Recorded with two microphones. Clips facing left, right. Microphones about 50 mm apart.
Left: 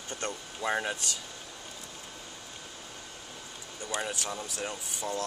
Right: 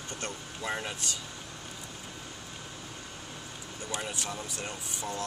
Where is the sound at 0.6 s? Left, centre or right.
Centre.